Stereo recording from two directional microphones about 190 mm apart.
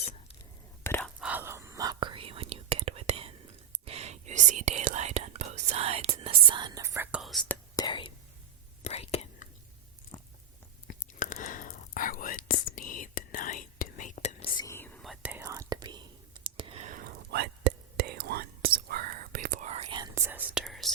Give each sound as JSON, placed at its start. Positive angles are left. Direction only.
{"t": 0.9, "sound": "whispering", "side_deg": 10}
{"t": 1.2, "sound": "whispering", "side_deg": -10}
{"t": 7.2, "sound": "whispering", "side_deg": 0}
{"t": 7.8, "sound": "whispering", "side_deg": 25}
{"t": 10.8, "sound": "whispering", "side_deg": 40}
{"t": 14.5, "sound": "whispering", "side_deg": 15}
{"t": 17.3, "sound": "whispering", "side_deg": -60}
{"t": 20.0, "sound": "whispering", "side_deg": -15}